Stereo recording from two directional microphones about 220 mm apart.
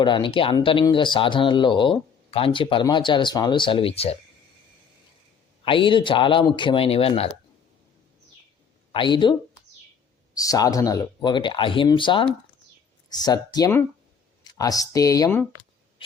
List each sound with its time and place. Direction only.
0.0 s speech: 20° left (ahead or behind)
5.6 s speech: 20° left (ahead or behind)
8.9 s speech: 20° left (ahead or behind)
10.3 s speech: 15° left (ahead or behind)